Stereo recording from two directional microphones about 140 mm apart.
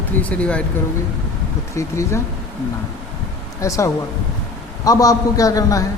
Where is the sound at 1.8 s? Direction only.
20° left (ahead or behind).